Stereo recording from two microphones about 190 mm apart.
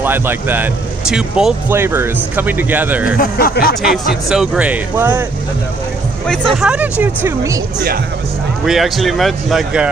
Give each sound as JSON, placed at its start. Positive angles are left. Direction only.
{"t": 0.0, "sound": "speech", "side_deg": -10}
{"t": 3.2, "sound": "speech", "side_deg": 55}
{"t": 3.9, "sound": "speech", "side_deg": 0}
{"t": 6.5, "sound": "speech", "side_deg": -5}
{"t": 8.6, "sound": "speech", "side_deg": 0}